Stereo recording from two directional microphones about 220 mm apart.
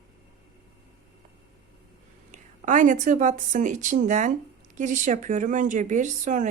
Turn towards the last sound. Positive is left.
turn(degrees=-35)  # may be behind; listen again after turning